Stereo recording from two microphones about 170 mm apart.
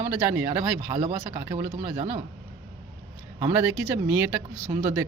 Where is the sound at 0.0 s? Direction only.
10° right (ahead or behind).